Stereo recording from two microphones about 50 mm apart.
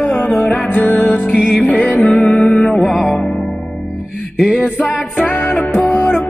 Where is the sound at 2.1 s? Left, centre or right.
Centre.